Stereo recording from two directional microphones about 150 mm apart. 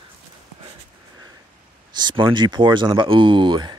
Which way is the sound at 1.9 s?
30° right (ahead or behind).